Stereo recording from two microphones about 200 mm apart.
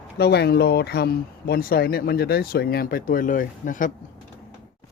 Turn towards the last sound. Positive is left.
turn(degrees=40)  # may be behind; listen again after turning